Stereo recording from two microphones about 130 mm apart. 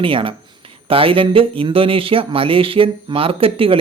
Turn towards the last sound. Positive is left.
turn(degrees=-45)  # may be behind; listen again after turning